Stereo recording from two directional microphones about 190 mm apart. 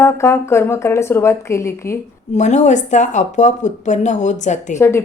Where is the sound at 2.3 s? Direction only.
40° left (ahead or behind).